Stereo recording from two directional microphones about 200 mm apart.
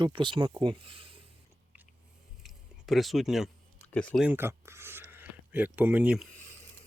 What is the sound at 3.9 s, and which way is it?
Speech, 5° left (ahead or behind).